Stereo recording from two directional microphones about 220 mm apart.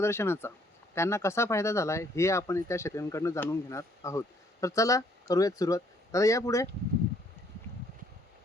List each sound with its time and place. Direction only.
0.0 s speech: 10° left (ahead or behind)